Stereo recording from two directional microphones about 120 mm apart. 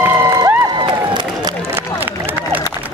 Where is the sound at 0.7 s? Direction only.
40° right (ahead or behind).